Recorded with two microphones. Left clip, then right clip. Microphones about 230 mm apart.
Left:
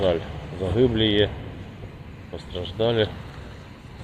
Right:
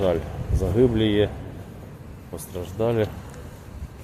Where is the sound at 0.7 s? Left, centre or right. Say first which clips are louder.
Even; right.